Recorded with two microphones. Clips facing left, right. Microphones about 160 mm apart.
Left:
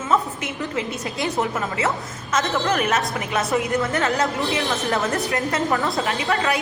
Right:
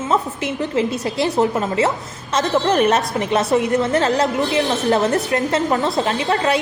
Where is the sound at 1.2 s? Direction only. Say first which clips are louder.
Right 6 dB; 30° right (ahead or behind).